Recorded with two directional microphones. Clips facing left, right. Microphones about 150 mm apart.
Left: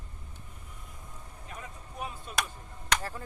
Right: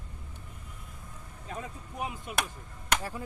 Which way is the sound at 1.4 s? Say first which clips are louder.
Right 6 dB; 30° right (ahead or behind).